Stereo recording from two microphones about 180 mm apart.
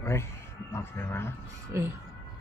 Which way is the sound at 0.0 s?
15° left (ahead or behind).